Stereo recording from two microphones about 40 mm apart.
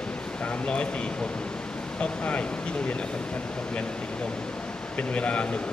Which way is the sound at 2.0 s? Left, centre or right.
Left.